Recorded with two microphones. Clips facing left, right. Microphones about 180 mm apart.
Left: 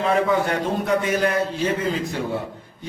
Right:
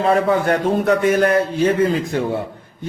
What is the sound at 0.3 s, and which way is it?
A man's voice, 50° right (ahead or behind).